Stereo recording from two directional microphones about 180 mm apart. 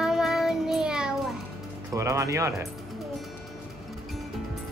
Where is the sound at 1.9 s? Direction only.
15° right (ahead or behind).